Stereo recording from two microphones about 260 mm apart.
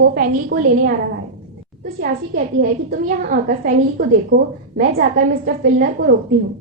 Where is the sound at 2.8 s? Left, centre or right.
Right.